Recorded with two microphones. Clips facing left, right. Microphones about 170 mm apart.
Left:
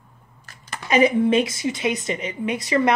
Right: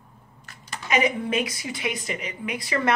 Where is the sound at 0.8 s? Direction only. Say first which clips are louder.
Left 7 dB; 30° left (ahead or behind).